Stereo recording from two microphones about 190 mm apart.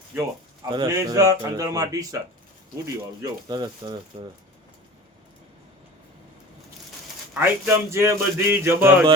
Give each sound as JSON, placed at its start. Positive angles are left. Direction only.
{"t": 0.7, "sound": "speech", "side_deg": -20}
{"t": 4.1, "sound": "speech", "side_deg": -35}
{"t": 7.3, "sound": "speech", "side_deg": -10}